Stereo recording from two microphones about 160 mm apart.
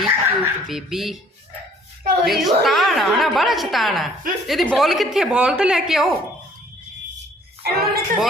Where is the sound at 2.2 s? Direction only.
Centre (ahead or behind).